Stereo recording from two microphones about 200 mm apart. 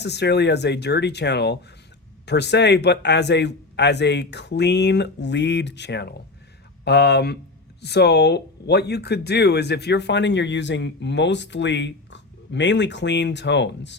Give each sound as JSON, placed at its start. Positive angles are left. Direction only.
{"t": 0.0, "sound": "speech", "side_deg": 60}